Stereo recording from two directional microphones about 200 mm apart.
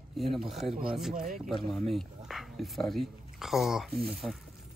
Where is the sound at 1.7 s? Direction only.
Centre (ahead or behind).